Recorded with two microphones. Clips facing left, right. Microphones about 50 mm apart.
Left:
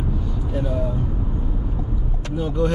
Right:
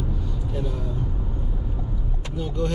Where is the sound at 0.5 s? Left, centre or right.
Centre.